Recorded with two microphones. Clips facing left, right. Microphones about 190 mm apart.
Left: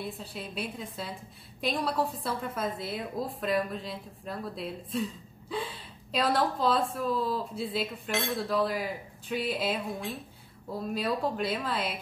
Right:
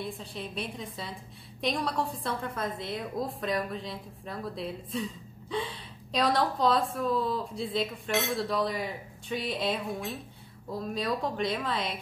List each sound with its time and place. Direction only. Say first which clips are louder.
0.2 s a woman's voice: even; 5° left (ahead or behind)